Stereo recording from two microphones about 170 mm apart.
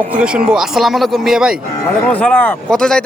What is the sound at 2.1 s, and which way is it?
Speech, 10° left (ahead or behind).